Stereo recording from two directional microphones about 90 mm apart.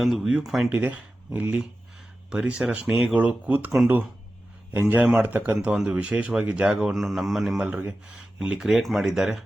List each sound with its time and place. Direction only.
0.0 s speech: centre (ahead or behind)
0.7 s speech: 15° right (ahead or behind)
4.7 s a man's voice: 20° right (ahead or behind); by 7.7 s 5° right (ahead or behind)
7.7 s speech: 15° right (ahead or behind)